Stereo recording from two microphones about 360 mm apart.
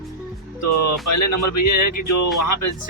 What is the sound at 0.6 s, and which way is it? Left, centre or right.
Speech, left.